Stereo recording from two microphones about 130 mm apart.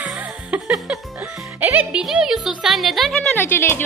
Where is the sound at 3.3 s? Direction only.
15° left (ahead or behind).